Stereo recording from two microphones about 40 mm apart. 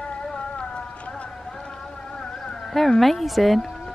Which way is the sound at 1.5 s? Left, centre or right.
Centre.